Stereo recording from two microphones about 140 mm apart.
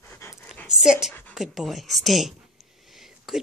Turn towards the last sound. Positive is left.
turn(degrees=0)  # may be behind; listen again after turning